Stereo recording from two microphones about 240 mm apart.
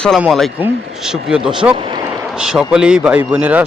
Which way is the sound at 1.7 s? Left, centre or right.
Right.